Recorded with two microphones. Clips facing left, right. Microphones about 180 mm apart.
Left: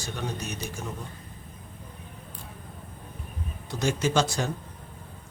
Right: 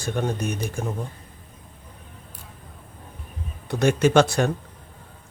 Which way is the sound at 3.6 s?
60° right (ahead or behind).